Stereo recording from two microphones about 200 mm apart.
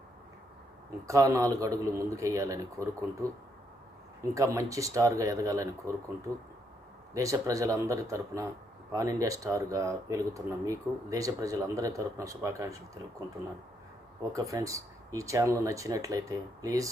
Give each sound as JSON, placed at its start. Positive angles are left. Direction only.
{"t": 1.0, "sound": "speech", "side_deg": -15}
{"t": 4.2, "sound": "speech", "side_deg": -15}
{"t": 7.1, "sound": "speech", "side_deg": -15}
{"t": 14.2, "sound": "speech", "side_deg": -15}